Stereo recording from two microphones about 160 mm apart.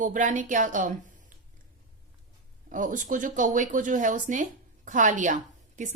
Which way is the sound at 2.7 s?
55° right (ahead or behind).